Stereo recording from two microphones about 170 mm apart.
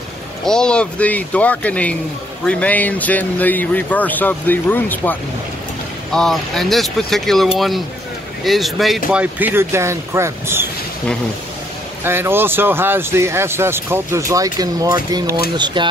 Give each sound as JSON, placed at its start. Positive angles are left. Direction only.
{"t": 0.5, "sound": "speech", "side_deg": 5}
{"t": 6.1, "sound": "speech", "side_deg": 0}
{"t": 12.0, "sound": "speech", "side_deg": -15}